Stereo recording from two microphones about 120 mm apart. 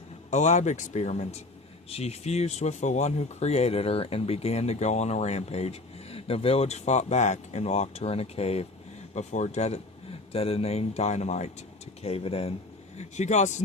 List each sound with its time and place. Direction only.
0.3 s speech: 80° left; by 8.6 s 60° left (ahead or behind)
9.1 s speech: 75° left (ahead or behind)
12.0 s speech: 55° left (ahead or behind)
13.0 s speech: 75° left (ahead or behind)